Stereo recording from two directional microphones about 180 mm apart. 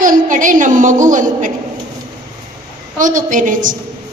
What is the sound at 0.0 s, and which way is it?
A woman's voice, 45° right (ahead or behind).